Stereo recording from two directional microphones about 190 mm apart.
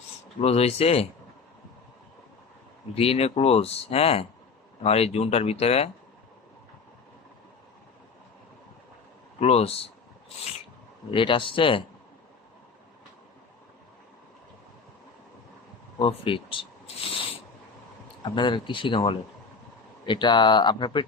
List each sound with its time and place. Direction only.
0.3 s speech: 35° left (ahead or behind)
2.9 s speech: 30° left (ahead or behind)
9.4 s speech: 30° left (ahead or behind)
11.1 s speech: 25° left (ahead or behind)
16.0 s speech: 25° left (ahead or behind)
18.2 s speech: 25° left (ahead or behind)